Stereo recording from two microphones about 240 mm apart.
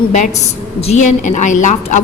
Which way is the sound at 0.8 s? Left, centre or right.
Left.